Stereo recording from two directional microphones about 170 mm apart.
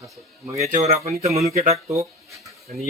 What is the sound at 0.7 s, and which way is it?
Speech, 45° right (ahead or behind).